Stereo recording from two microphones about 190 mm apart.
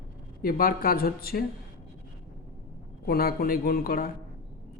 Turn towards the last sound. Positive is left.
turn(degrees=50)  # may be behind; listen again after turning